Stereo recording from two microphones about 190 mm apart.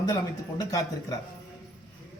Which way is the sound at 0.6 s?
20° left (ahead or behind).